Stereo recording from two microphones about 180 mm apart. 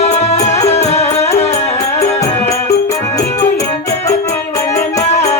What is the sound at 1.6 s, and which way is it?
Music, 15° left (ahead or behind).